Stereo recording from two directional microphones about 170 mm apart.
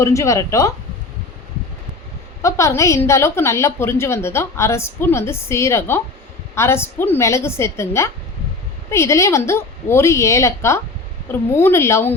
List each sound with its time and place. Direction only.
0.0 s a woman's voice: 20° left (ahead or behind)
2.4 s a woman's voice: 20° left (ahead or behind)